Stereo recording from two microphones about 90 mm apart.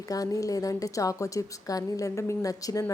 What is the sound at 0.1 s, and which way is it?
A woman's voice, 40° left (ahead or behind).